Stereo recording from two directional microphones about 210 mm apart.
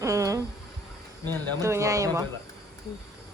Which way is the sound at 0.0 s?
15° right (ahead or behind).